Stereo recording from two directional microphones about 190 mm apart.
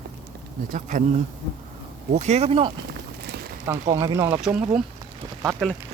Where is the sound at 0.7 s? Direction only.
45° right (ahead or behind).